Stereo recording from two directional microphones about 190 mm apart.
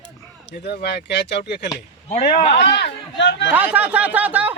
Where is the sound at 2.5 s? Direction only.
60° left (ahead or behind).